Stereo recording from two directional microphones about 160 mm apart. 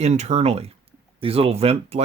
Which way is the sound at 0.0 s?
45° right (ahead or behind).